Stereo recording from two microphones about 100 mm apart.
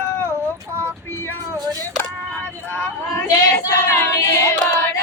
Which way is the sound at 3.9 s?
25° left (ahead or behind).